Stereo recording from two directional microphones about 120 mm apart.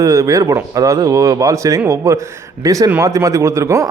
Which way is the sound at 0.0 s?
25° right (ahead or behind).